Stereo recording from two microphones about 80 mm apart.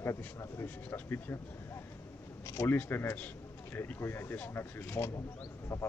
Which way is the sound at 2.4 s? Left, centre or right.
Left.